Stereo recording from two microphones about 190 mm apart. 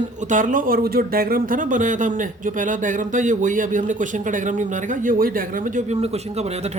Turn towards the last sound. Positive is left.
turn(degrees=-35)  # may be behind; listen again after turning